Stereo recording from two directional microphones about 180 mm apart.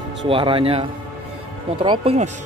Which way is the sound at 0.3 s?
30° right (ahead or behind).